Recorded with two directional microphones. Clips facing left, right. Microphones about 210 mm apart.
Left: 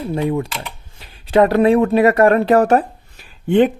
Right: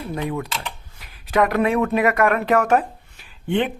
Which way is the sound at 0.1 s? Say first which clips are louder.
Left 6 dB; 25° left (ahead or behind).